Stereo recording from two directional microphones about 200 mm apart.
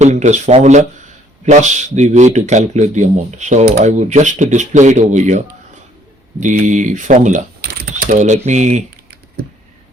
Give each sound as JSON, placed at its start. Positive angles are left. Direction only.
{"t": 0.0, "sound": "speech", "side_deg": -35}
{"t": 6.4, "sound": "speech", "side_deg": -40}